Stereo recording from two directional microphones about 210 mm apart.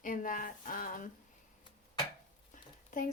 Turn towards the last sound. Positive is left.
turn(degrees=35)  # may be behind; listen again after turning